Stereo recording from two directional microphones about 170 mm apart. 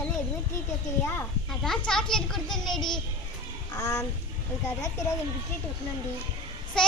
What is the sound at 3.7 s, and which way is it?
Speech, 20° left (ahead or behind).